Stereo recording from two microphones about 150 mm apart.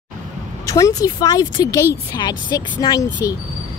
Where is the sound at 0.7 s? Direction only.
20° left (ahead or behind).